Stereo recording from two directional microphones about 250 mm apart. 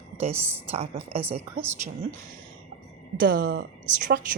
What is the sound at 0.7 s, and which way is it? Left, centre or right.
Speech, right.